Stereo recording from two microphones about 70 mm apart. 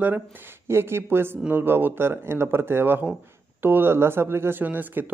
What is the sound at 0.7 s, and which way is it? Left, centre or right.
Speech, right.